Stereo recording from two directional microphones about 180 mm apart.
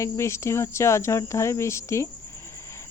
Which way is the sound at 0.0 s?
15° left (ahead or behind).